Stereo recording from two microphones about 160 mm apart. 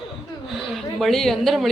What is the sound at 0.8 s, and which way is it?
Speech, centre (ahead or behind).